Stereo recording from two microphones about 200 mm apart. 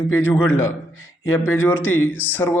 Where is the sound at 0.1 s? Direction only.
10° left (ahead or behind).